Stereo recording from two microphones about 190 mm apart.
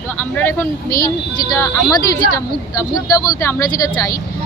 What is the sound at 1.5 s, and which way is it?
Speech, 15° left (ahead or behind).